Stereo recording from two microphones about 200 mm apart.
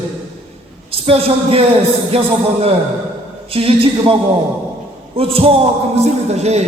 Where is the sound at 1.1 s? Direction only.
30° right (ahead or behind).